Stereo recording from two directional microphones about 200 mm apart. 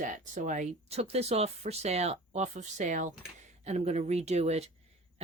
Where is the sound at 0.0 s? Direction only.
40° right (ahead or behind).